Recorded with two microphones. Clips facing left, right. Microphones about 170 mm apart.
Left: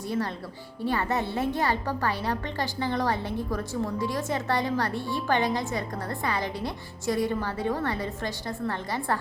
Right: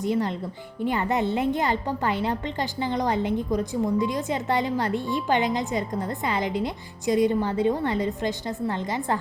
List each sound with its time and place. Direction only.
0.0 s a woman's voice: 20° right (ahead or behind)